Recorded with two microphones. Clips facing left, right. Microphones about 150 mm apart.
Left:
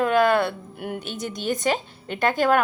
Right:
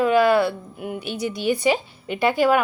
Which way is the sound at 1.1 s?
45° left (ahead or behind).